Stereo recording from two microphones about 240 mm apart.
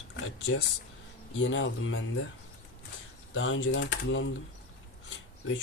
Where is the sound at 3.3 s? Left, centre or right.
Left.